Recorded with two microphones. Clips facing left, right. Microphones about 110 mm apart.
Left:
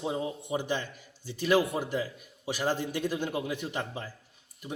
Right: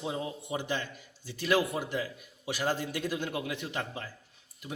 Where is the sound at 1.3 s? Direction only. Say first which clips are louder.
Left 2 dB; 15° left (ahead or behind).